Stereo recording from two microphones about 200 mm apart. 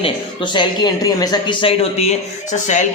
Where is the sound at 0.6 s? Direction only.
20° left (ahead or behind).